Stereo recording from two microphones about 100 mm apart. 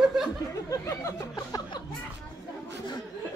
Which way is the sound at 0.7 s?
35° left (ahead or behind).